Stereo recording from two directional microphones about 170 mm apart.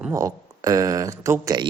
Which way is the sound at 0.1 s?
20° right (ahead or behind).